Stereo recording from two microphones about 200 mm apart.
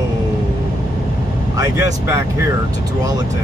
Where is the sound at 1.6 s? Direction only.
15° right (ahead or behind).